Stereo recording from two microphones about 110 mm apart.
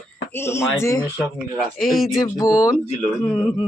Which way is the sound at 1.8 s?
Centre (ahead or behind).